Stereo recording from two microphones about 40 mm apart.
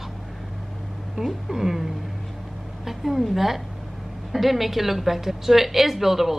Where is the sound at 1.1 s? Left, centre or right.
Centre.